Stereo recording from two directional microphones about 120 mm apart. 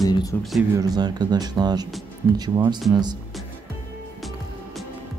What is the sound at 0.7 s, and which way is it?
Speech, 35° right (ahead or behind).